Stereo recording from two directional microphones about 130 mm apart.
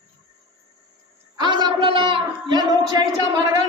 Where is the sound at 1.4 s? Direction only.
35° right (ahead or behind).